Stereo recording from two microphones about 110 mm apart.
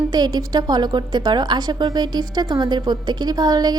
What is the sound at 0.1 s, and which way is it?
A woman's voice, 40° right (ahead or behind).